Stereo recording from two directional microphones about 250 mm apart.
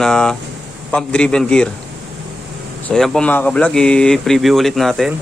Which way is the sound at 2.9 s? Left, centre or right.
Centre.